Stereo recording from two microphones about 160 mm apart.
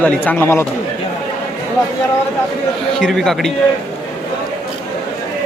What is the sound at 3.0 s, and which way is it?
Speech, centre (ahead or behind).